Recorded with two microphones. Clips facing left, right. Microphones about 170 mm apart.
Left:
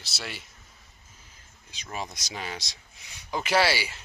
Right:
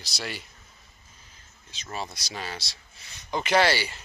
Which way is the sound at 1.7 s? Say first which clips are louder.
Right 1 dB; 15° left (ahead or behind).